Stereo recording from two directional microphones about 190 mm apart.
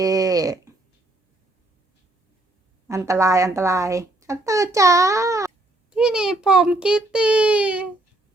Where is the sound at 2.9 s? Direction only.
15° right (ahead or behind).